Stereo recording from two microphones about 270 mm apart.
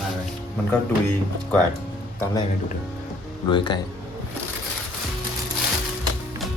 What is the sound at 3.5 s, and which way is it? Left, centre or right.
Speech, centre.